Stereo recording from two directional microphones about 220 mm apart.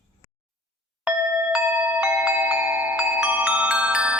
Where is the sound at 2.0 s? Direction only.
5° right (ahead or behind).